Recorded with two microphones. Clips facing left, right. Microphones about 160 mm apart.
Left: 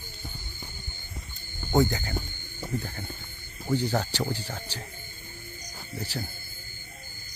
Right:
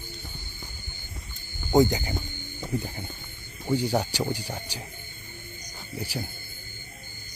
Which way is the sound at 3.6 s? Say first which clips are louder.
Right 2 dB; 10° right (ahead or behind).